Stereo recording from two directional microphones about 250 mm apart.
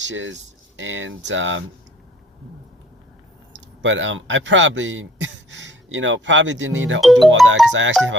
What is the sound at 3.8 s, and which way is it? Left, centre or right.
Speech, right.